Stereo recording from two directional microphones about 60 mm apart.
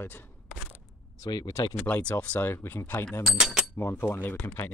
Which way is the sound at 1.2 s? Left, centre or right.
Left.